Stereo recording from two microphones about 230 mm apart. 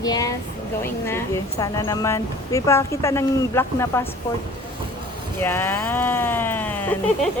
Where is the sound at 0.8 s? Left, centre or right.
Centre.